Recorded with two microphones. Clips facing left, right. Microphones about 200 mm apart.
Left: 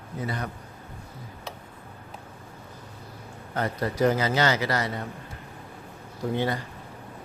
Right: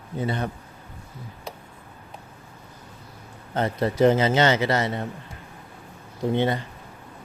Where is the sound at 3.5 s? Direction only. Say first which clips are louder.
Right 4 dB; 25° right (ahead or behind).